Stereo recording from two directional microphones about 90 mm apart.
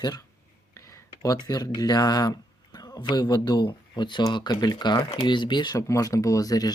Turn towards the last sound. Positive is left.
turn(degrees=45)  # may be behind; listen again after turning